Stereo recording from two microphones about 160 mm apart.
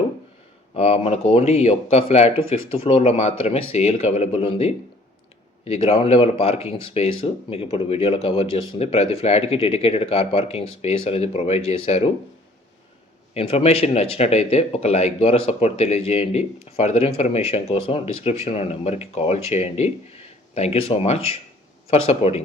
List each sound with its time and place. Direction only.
0.8 s speech: 40° left (ahead or behind)
13.3 s speech: 40° left (ahead or behind)